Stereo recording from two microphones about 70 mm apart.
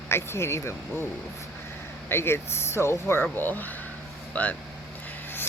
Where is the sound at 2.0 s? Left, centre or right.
Left.